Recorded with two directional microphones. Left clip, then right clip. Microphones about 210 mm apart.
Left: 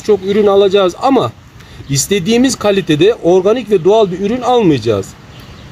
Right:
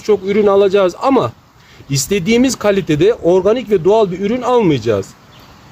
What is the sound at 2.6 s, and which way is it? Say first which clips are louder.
Speech: left 2 dB; 5° left (ahead or behind).